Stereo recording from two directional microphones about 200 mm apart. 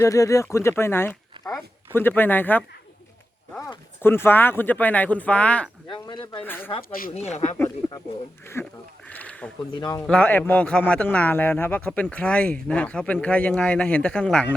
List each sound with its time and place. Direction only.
0.0 s speech: 15° left (ahead or behind)
5.9 s speech: 25° left (ahead or behind)
6.4 s speech: 10° left (ahead or behind)
7.1 s speech: 30° left (ahead or behind)
7.5 s speech: 15° left (ahead or behind)
9.0 s a sound: 5° left (ahead or behind)
9.7 s speech: 20° left (ahead or behind)
10.0 s speech: 5° left (ahead or behind)